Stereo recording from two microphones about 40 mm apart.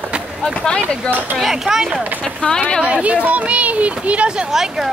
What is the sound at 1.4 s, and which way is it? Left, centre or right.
Speech, centre.